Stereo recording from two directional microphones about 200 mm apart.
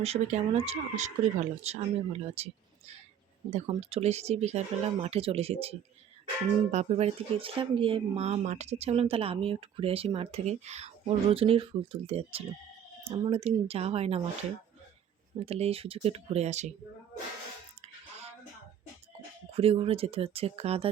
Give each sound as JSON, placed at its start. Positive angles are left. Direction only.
{"t": 0.0, "sound": "speech", "side_deg": -30}
{"t": 15.4, "sound": "speech", "side_deg": -30}
{"t": 19.5, "sound": "speech", "side_deg": -30}